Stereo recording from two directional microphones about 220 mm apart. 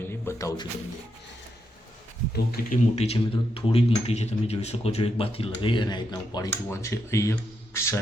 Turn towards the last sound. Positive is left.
turn(degrees=15)  # may be behind; listen again after turning